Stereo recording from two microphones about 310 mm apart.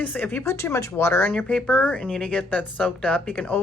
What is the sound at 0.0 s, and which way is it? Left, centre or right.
A woman's voice, centre.